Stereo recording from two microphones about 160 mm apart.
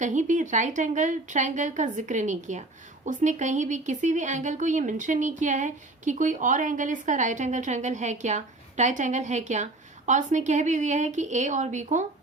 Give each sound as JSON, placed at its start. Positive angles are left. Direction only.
{"t": 0.0, "sound": "a woman's voice", "side_deg": -50}